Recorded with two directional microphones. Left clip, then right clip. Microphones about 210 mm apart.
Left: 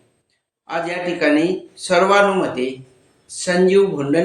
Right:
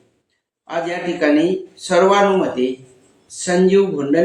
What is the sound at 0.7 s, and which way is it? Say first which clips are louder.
Speech: even; 10° left (ahead or behind).